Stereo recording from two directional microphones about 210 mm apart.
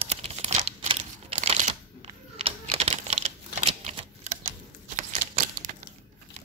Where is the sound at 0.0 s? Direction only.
30° right (ahead or behind).